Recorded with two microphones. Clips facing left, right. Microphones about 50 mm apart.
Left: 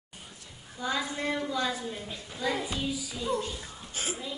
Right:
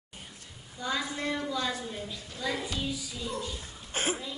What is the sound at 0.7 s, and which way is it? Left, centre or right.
A woman's voice, centre.